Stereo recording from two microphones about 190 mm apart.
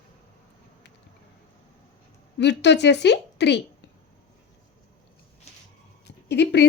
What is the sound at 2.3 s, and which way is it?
A woman's voice, 65° left (ahead or behind).